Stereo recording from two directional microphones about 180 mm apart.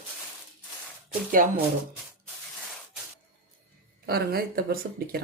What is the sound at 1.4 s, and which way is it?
Speech, 45° right (ahead or behind).